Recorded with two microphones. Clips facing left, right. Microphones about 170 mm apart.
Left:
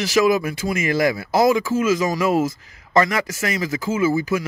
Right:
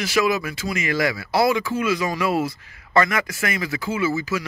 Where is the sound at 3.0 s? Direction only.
30° left (ahead or behind).